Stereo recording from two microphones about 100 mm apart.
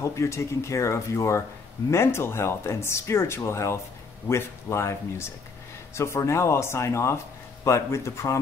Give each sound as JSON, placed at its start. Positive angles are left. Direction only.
{"t": 0.0, "sound": "speech", "side_deg": 30}